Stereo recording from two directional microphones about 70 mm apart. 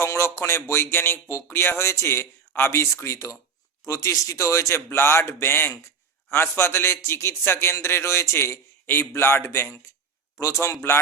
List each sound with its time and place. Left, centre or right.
0.0 s a man's voice: left
10.4 s speech: left